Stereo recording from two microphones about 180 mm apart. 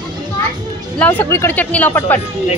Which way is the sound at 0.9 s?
10° left (ahead or behind).